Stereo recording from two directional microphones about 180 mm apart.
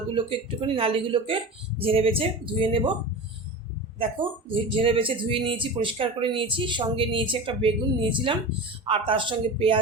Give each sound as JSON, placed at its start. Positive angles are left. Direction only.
{"t": 0.1, "sound": "speech", "side_deg": -30}
{"t": 3.9, "sound": "speech", "side_deg": -30}